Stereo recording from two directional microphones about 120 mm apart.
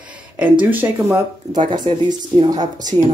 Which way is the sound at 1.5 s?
35° right (ahead or behind).